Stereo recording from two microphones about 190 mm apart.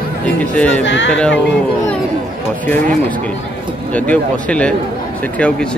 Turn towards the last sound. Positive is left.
turn(degrees=5)  # may be behind; listen again after turning